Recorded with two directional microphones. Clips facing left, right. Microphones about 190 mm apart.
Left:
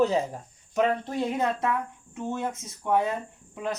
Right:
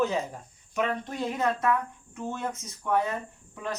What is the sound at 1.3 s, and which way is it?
Speech, 25° left (ahead or behind).